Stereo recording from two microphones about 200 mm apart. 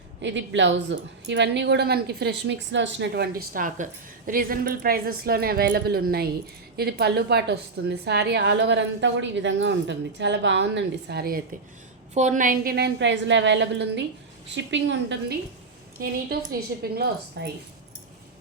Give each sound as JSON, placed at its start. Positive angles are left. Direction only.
{"t": 0.2, "sound": "a woman's voice", "side_deg": -65}
{"t": 12.1, "sound": "a woman's voice", "side_deg": -35}
{"t": 16.0, "sound": "a woman's voice", "side_deg": -50}